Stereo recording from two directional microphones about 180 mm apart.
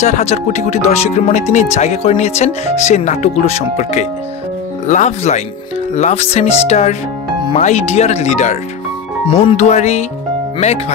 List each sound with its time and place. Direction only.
0.0 s speech: 40° left (ahead or behind)